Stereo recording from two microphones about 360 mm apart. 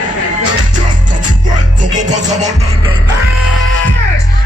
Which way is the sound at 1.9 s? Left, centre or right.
Centre.